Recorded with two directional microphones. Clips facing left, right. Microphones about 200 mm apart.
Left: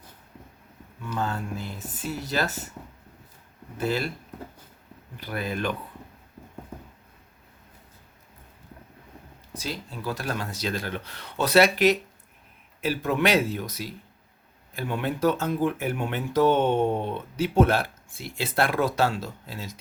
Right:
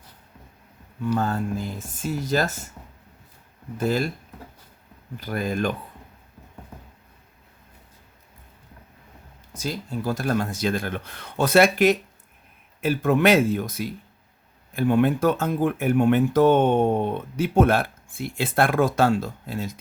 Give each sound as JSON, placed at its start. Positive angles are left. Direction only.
{"t": 1.1, "sound": "speech", "side_deg": -40}
{"t": 3.8, "sound": "speech", "side_deg": -45}
{"t": 5.2, "sound": "speech", "side_deg": -45}
{"t": 9.6, "sound": "speech", "side_deg": -45}